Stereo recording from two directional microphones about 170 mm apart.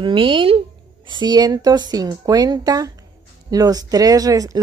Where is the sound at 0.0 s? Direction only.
30° right (ahead or behind).